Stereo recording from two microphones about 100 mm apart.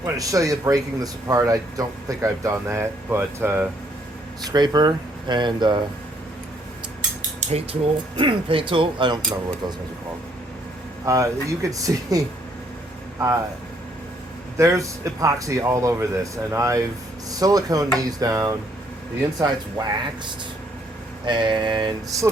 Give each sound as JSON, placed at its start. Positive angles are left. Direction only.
{"t": 0.0, "sound": "speech", "side_deg": -35}
{"t": 4.4, "sound": "speech", "side_deg": -45}
{"t": 7.5, "sound": "speech", "side_deg": -65}
{"t": 11.0, "sound": "speech", "side_deg": -30}
{"t": 14.6, "sound": "speech", "side_deg": -30}
{"t": 19.8, "sound": "speech", "side_deg": -45}
{"t": 21.2, "sound": "speech", "side_deg": -50}
{"t": 22.1, "sound": "speech", "side_deg": -35}